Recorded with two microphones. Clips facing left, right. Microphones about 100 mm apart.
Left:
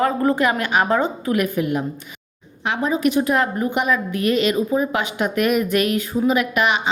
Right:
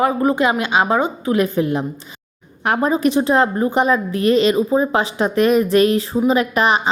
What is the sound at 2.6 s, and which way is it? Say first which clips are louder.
A woman's voice: right 3 dB; 45° right (ahead or behind).